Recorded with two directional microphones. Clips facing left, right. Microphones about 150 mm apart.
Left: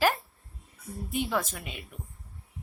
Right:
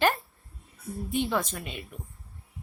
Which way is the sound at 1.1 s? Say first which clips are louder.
Right 2 dB; 5° left (ahead or behind).